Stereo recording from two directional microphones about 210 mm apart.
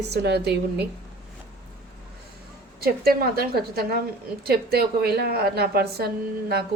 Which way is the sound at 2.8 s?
45° right (ahead or behind).